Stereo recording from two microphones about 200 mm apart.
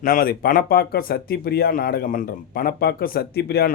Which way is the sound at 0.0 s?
45° left (ahead or behind).